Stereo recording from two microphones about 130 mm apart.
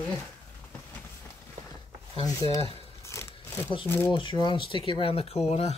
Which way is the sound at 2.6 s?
45° right (ahead or behind).